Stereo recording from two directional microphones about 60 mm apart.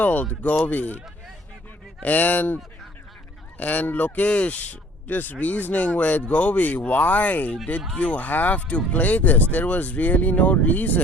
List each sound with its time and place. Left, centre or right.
0.0 s speech: left
2.0 s speech: left
3.6 s speech: left